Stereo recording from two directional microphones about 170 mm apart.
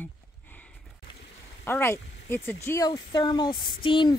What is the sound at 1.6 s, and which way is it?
Speech, 15° left (ahead or behind).